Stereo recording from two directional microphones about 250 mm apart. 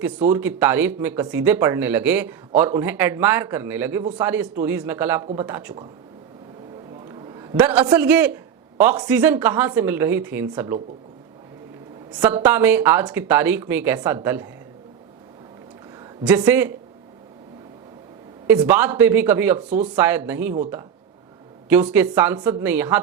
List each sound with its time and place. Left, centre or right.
0.0 s speech: centre
7.1 s a man's voice: centre
12.2 s speech: centre
16.2 s speech: centre
18.4 s speech: centre
21.7 s speech: centre